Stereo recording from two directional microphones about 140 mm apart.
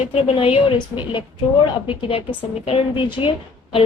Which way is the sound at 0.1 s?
45° left (ahead or behind).